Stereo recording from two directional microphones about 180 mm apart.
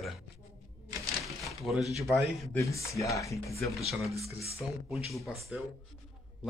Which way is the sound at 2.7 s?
15° left (ahead or behind).